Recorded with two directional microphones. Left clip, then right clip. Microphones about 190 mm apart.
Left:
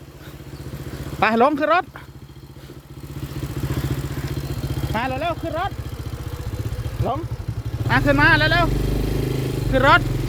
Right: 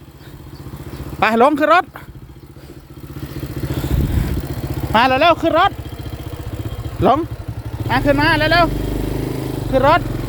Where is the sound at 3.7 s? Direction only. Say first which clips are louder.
Right 5 dB; 15° right (ahead or behind).